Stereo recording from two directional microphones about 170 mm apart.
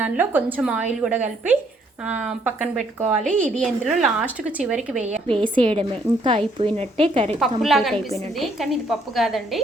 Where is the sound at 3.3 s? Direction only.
5° left (ahead or behind).